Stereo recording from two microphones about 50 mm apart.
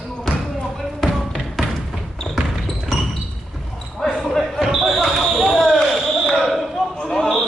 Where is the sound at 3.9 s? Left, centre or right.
Centre.